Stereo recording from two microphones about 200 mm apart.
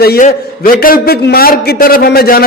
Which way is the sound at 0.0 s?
50° left (ahead or behind).